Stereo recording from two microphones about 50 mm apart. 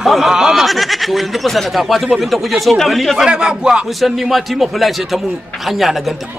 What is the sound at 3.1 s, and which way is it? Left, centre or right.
Speech, centre.